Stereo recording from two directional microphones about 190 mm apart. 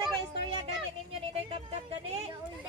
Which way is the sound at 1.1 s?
30° right (ahead or behind).